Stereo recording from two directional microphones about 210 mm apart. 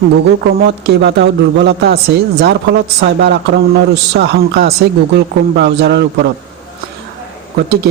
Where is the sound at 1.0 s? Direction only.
55° right (ahead or behind).